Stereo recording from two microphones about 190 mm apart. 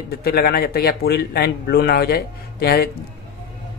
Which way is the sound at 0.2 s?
55° left (ahead or behind).